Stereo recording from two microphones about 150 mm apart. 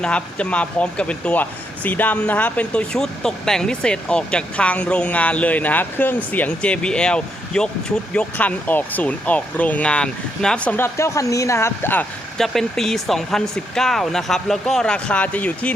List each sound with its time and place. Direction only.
0.0 s speech: 10° left (ahead or behind)
12.4 s speech: 5° left (ahead or behind)